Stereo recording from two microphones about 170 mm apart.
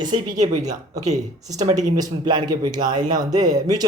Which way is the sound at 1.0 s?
40° right (ahead or behind).